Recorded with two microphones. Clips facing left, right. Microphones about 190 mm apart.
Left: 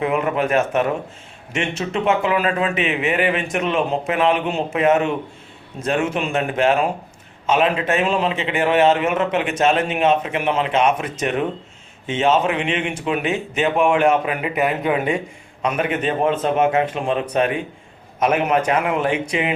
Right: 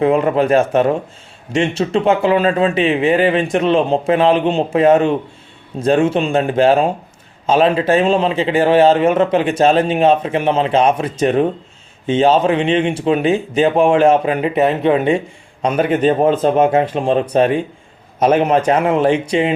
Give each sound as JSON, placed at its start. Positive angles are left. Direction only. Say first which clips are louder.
{"t": 0.0, "sound": "a man's voice", "louder": "right 6 dB", "side_deg": -30}